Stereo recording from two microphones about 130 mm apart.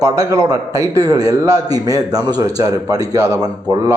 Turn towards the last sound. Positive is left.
turn(degrees=-30)  # may be behind; listen again after turning